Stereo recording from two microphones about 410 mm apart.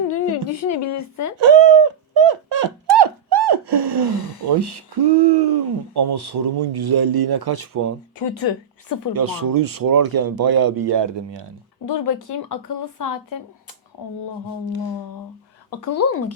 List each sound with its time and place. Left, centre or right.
0.1 s a woman's voice: left
1.4 s speech: right
1.8 s a sound: right
4.4 s speech: right
8.2 s a woman's voice: left
9.1 s speech: right
12.5 s a woman's voice: left
15.8 s speech: left